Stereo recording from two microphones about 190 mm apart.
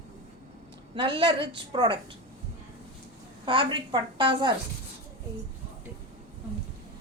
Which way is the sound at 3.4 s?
25° right (ahead or behind).